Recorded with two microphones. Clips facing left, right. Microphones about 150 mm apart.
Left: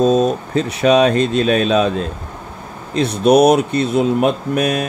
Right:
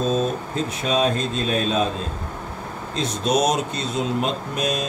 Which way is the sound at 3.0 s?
60° left (ahead or behind).